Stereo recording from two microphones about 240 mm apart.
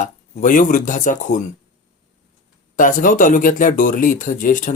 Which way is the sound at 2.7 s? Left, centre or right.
Left.